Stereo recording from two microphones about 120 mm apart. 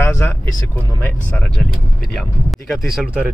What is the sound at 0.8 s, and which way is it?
Speech, 20° left (ahead or behind).